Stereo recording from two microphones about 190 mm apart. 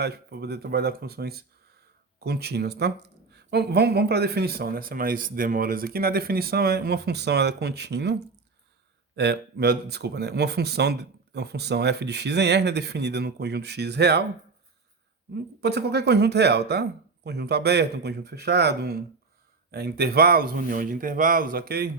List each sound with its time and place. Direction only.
0.0 s speech: 55° right (ahead or behind)
15.3 s speech: 60° right (ahead or behind)